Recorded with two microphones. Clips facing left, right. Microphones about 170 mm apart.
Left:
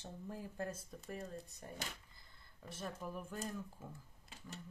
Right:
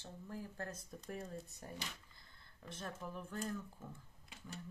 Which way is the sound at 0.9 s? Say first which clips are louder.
Even; centre (ahead or behind).